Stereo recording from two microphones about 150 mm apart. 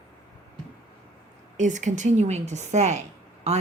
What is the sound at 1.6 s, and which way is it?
A woman's voice, 55° right (ahead or behind).